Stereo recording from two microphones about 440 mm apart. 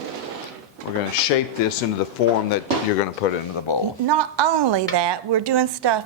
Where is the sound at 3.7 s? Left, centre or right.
Left.